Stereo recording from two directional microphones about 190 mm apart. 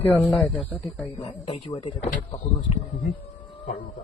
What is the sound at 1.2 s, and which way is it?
Speech, 25° left (ahead or behind).